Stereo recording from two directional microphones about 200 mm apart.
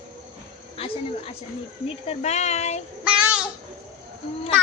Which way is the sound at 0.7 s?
30° left (ahead or behind).